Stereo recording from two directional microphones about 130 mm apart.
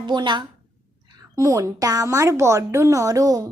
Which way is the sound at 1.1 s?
25° right (ahead or behind).